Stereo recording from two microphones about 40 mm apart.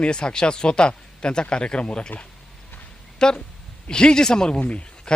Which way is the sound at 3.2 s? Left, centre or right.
Centre.